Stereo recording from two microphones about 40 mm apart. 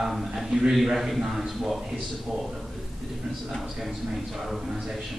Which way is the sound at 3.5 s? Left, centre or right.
Centre.